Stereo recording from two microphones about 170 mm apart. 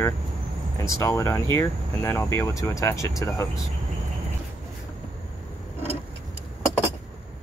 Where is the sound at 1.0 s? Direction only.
15° left (ahead or behind).